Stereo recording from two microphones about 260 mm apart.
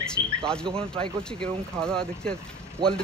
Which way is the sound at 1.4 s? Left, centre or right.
Centre.